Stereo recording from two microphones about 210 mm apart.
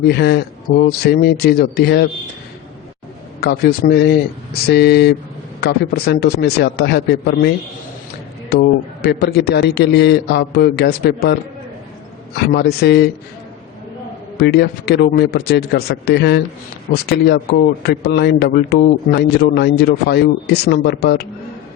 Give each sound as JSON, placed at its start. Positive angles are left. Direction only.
{"t": 0.1, "sound": "a man's voice", "side_deg": 50}
{"t": 3.4, "sound": "a man's voice", "side_deg": 50}
{"t": 12.5, "sound": "a man's voice", "side_deg": 50}
{"t": 14.3, "sound": "a man's voice", "side_deg": 50}